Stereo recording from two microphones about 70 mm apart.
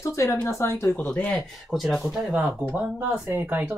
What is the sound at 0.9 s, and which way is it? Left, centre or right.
Speech, centre.